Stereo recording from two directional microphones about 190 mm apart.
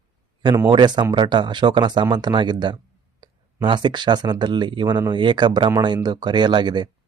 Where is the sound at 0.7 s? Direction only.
25° right (ahead or behind).